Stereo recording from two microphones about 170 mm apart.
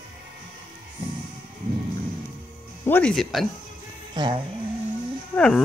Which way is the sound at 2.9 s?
5° left (ahead or behind).